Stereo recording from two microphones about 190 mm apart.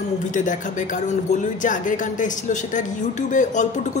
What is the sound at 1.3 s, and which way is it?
Speech, 40° left (ahead or behind).